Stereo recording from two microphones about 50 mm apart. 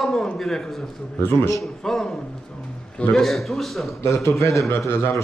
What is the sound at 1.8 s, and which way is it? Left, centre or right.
Speech, centre.